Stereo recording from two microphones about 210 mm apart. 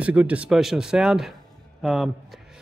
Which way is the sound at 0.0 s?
5° right (ahead or behind).